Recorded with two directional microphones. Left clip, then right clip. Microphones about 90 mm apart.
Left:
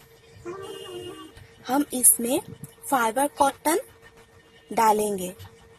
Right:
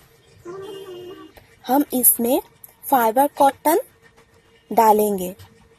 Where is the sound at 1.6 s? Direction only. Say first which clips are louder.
Right 6 dB; 30° right (ahead or behind).